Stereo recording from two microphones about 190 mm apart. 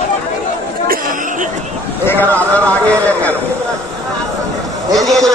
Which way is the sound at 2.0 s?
10° left (ahead or behind).